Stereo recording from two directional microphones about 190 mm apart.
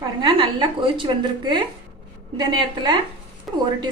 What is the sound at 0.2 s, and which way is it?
Speech, 25° right (ahead or behind).